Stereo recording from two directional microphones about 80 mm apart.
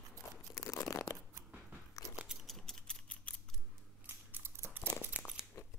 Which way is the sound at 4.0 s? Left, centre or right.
Right.